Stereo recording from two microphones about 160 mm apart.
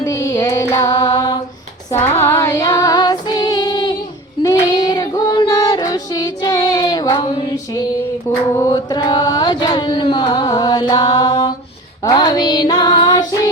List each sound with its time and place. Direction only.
0.0 s child singing: 20° left (ahead or behind)
1.9 s female singing: 15° left (ahead or behind)
4.4 s child singing: 20° left (ahead or behind)
8.5 s chant: 25° left (ahead or behind)
12.0 s child singing: 25° left (ahead or behind)